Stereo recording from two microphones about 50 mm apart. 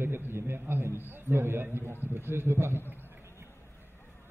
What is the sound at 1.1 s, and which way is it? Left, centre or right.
A man's voice, right.